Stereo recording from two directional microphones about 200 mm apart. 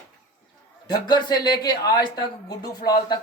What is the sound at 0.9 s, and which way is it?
Speech, 20° left (ahead or behind).